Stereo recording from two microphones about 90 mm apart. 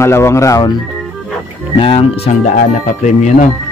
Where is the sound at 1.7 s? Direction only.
85° left.